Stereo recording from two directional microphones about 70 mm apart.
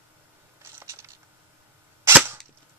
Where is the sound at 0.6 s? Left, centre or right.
Right.